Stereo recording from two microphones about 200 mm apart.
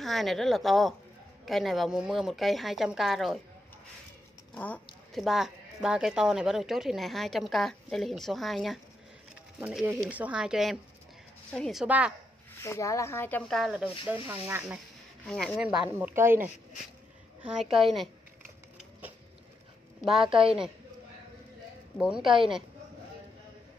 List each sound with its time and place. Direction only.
0.0 s speech: centre (ahead or behind)
4.6 s speech: 5° left (ahead or behind)
12.6 s speech: 15° left (ahead or behind); by 14.8 s 10° right (ahead or behind)
15.2 s speech: centre (ahead or behind)
20.3 s speech: 5° right (ahead or behind)
21.9 s speech: centre (ahead or behind)